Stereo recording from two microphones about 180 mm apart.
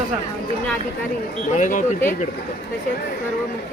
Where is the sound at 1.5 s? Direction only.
45° left (ahead or behind).